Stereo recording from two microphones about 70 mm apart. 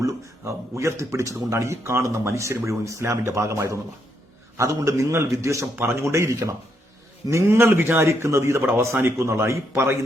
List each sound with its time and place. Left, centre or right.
0.0 s a man's voice: right